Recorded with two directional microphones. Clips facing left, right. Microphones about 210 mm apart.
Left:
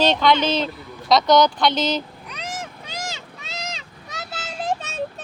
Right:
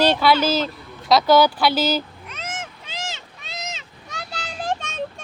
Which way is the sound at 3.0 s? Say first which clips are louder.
Left 1 dB; centre (ahead or behind).